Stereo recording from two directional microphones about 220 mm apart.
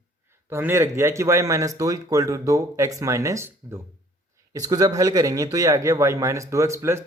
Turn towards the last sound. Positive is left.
turn(degrees=-10)  # may be behind; listen again after turning